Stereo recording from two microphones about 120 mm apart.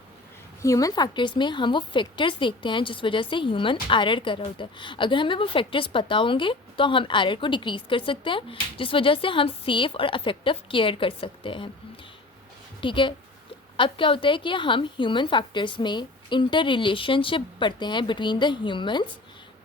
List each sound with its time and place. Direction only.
0.6 s a woman's voice: 30° left (ahead or behind); by 11.7 s 45° left (ahead or behind)
12.8 s a woman's voice: 45° left (ahead or behind)